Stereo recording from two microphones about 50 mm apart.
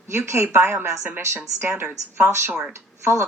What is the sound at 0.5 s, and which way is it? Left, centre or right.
Speech, right.